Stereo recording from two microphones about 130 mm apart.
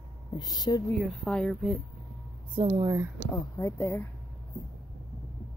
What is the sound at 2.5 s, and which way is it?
Speech, 40° right (ahead or behind).